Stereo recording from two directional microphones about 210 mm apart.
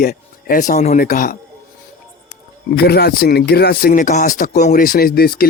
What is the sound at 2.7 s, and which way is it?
Speech, 50° left (ahead or behind).